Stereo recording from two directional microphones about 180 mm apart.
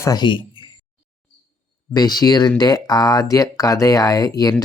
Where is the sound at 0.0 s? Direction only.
20° left (ahead or behind).